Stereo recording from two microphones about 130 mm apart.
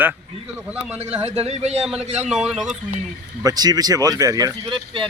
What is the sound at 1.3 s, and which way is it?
Speech, 55° right (ahead or behind).